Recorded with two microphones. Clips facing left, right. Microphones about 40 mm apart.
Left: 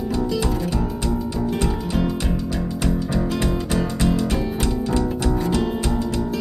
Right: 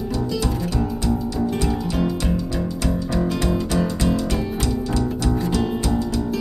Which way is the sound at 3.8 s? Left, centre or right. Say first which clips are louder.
Even; left.